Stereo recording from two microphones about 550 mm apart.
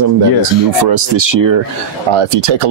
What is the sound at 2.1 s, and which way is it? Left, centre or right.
Speech, right.